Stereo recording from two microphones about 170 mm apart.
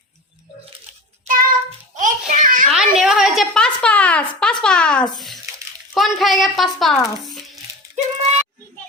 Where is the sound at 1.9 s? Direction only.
50° right (ahead or behind).